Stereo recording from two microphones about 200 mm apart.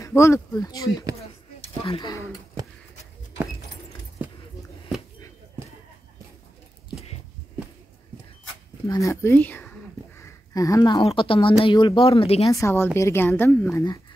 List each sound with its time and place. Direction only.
0.0 s a woman's voice: 15° left (ahead or behind)
6.9 s a sound: 30° left (ahead or behind)
8.8 s speech: 15° left (ahead or behind)
12.4 s a woman's voice: 15° left (ahead or behind)